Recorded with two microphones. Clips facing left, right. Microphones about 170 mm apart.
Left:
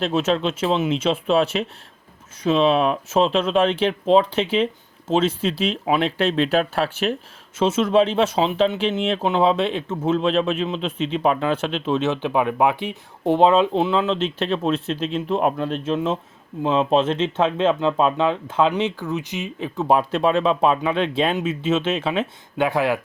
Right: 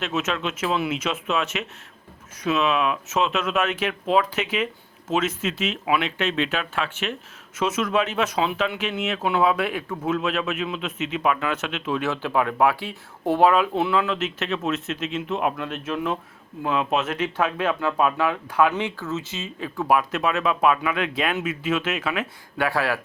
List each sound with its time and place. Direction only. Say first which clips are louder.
0.0 s speech: left 6 dB; 30° left (ahead or behind)